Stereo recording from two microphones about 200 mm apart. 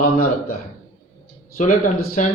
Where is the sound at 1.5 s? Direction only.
40° left (ahead or behind).